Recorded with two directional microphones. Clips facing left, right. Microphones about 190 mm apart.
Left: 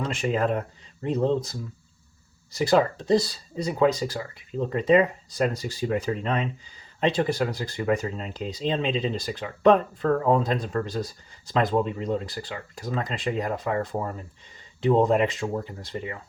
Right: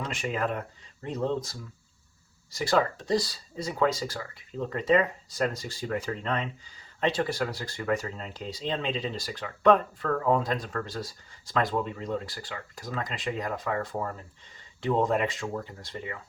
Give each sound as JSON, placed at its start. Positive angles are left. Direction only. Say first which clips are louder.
{"t": 0.1, "sound": "speech", "louder": "left 6 dB", "side_deg": 30}
{"t": 2.6, "sound": "speech", "louder": "left 5 dB", "side_deg": 20}